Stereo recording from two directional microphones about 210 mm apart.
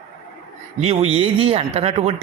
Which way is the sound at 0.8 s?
30° right (ahead or behind).